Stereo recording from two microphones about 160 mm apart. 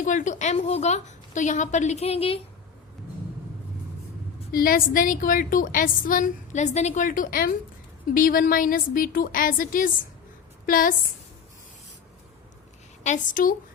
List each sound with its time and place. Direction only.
0.0 s a woman's voice: 50° left (ahead or behind); by 2.4 s 35° left (ahead or behind)
4.5 s a woman's voice: 65° left (ahead or behind)
13.0 s a woman's voice: 55° left (ahead or behind)